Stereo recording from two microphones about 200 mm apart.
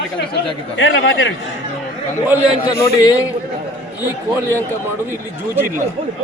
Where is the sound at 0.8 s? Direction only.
75° left (ahead or behind).